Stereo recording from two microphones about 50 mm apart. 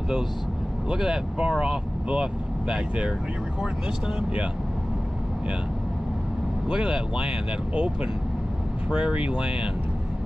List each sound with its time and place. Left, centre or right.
0.8 s speech: centre
6.7 s speech: centre